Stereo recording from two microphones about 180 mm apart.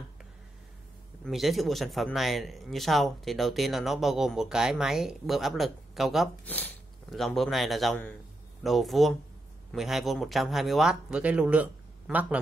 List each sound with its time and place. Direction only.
1.2 s speech: centre (ahead or behind)